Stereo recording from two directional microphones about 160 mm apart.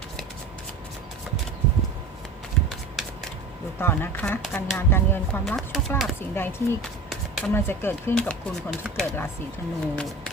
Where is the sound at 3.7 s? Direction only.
15° left (ahead or behind).